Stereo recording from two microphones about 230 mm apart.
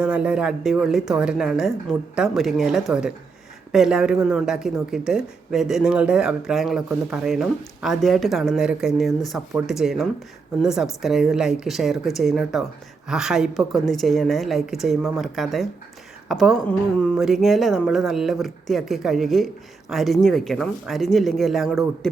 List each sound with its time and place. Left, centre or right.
0.0 s speech: centre